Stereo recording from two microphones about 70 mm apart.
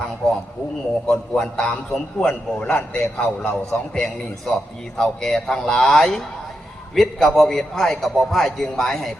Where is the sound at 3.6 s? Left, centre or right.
Centre.